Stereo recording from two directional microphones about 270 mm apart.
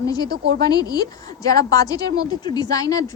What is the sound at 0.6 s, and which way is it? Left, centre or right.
Speech, centre.